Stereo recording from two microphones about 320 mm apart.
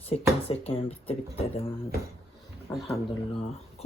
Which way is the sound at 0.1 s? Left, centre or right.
Centre.